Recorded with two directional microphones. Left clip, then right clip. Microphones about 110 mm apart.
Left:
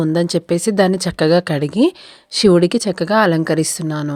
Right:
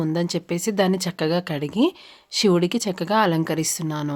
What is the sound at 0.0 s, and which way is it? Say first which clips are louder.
Speech: left 8 dB; 60° left (ahead or behind).